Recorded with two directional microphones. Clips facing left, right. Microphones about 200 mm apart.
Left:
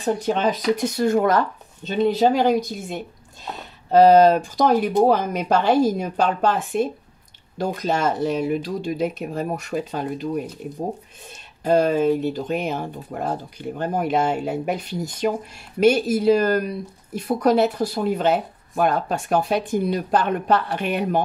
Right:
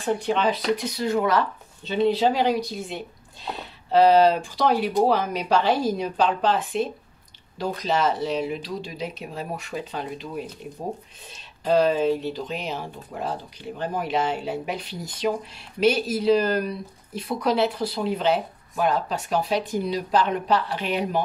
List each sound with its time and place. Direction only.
0.0 s speech: 40° left (ahead or behind)
11.6 s speech: 50° left (ahead or behind)